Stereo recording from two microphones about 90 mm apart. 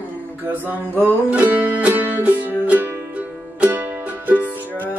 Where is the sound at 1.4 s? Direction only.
20° right (ahead or behind).